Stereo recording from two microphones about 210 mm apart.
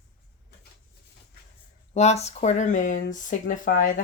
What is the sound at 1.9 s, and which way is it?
Speech, 30° left (ahead or behind).